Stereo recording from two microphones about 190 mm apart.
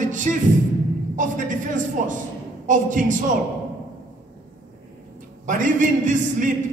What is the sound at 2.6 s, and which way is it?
Speech, 40° right (ahead or behind).